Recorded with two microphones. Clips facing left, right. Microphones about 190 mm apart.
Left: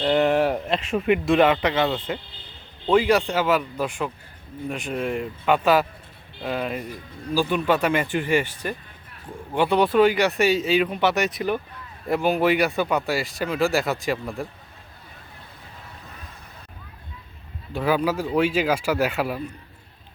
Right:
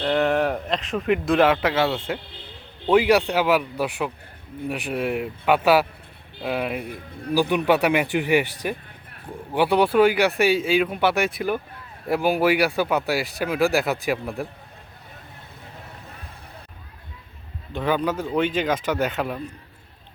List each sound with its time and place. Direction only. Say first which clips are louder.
0.0 s speech: left 1 dB; 5° left (ahead or behind)
6.7 s a man's voice: right 1 dB; 60° right (ahead or behind)
7.3 s speech: right 2 dB; 15° right (ahead or behind)
17.7 s speech: left 1 dB; 5° left (ahead or behind)